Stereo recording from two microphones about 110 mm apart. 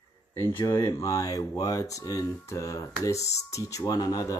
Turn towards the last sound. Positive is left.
turn(degrees=30)  # may be behind; listen again after turning